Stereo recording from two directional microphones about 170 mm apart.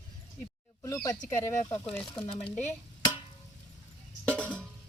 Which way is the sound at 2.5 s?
10° left (ahead or behind).